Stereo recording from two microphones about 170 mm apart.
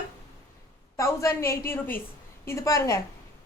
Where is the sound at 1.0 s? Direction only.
15° left (ahead or behind).